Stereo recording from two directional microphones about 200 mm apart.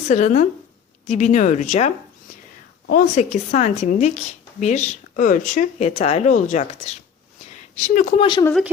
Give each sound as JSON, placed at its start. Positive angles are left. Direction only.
{"t": 0.1, "sound": "a woman's voice", "side_deg": 35}
{"t": 2.9, "sound": "a woman's voice", "side_deg": 35}
{"t": 8.2, "sound": "speech", "side_deg": 20}